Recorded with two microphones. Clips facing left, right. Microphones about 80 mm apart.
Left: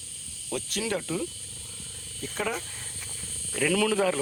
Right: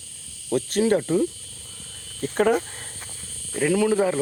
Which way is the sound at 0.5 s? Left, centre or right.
Right.